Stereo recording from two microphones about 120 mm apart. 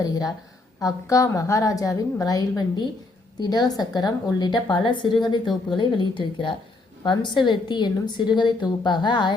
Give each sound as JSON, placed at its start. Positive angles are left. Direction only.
{"t": 0.0, "sound": "a woman's voice", "side_deg": 30}